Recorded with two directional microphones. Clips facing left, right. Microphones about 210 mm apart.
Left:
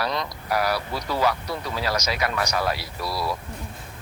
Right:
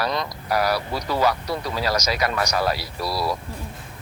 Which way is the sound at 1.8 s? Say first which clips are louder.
Right 2 dB; 40° right (ahead or behind).